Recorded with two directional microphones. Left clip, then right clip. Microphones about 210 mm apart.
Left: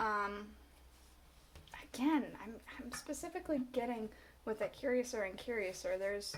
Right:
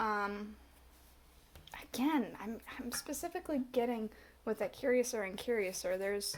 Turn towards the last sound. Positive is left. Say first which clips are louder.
# right 2 dB
turn(degrees=-50)  # may be behind; listen again after turning